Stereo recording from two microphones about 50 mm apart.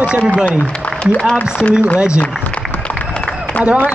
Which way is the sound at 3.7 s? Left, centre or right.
Right.